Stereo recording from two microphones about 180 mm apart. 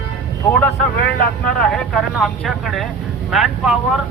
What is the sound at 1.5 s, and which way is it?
Speech, 5° left (ahead or behind).